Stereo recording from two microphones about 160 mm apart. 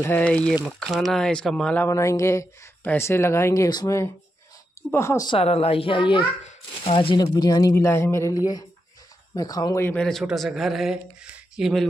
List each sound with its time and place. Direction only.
0.0 s speech: 10° left (ahead or behind)
5.3 s a woman's voice: 40° left (ahead or behind); by 10.0 s 15° left (ahead or behind)
10.0 s speech: centre (ahead or behind)